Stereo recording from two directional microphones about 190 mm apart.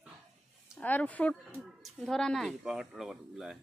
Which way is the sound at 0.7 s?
10° left (ahead or behind).